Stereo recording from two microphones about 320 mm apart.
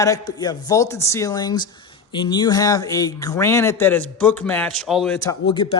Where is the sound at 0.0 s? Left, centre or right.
Centre.